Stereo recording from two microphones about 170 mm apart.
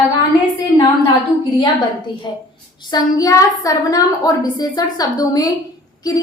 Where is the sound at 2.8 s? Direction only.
25° left (ahead or behind).